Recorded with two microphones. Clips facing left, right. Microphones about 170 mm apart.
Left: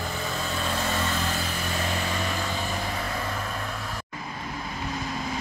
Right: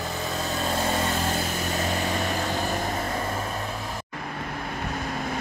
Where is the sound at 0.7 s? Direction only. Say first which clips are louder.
Right 3 dB; 40° right (ahead or behind).